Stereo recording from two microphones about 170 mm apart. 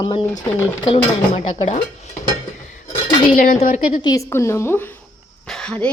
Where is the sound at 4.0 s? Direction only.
20° left (ahead or behind).